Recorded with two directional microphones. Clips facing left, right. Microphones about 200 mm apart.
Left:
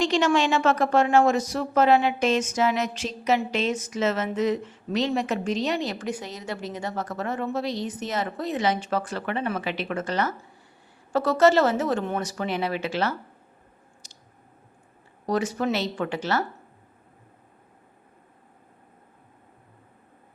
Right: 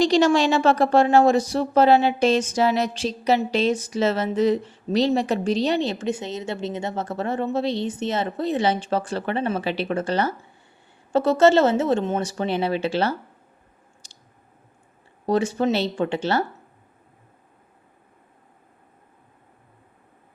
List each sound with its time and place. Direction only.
0.0 s a woman's voice: 35° right (ahead or behind)
14.0 s squish: 30° right (ahead or behind)
15.3 s speech: 30° right (ahead or behind)